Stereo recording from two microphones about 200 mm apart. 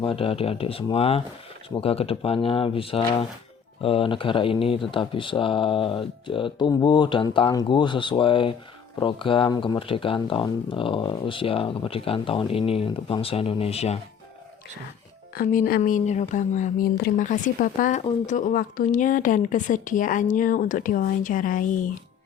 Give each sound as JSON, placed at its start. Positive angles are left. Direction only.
{"t": 0.0, "sound": "speech", "side_deg": 25}
{"t": 15.4, "sound": "speech", "side_deg": 45}